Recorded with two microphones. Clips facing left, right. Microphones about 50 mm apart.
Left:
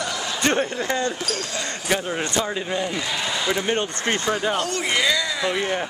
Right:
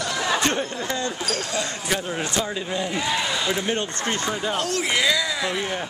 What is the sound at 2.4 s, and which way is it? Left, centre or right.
Speech, centre.